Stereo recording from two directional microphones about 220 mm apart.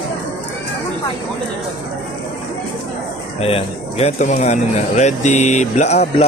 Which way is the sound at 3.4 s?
25° left (ahead or behind).